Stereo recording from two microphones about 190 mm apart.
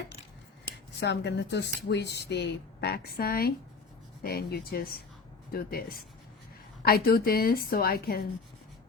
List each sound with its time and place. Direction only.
0.9 s a woman's voice: 65° left (ahead or behind)